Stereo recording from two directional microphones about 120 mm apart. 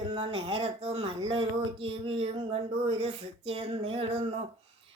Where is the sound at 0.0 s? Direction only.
50° right (ahead or behind).